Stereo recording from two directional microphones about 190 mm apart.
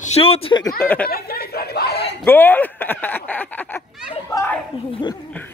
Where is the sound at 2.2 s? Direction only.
10° left (ahead or behind).